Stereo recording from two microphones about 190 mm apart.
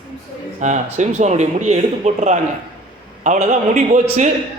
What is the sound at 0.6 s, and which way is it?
A man's voice, 40° right (ahead or behind).